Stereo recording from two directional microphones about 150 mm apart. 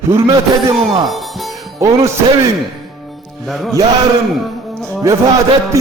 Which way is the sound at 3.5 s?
Centre (ahead or behind).